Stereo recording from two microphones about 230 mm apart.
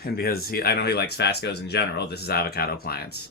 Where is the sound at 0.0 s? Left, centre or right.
Left.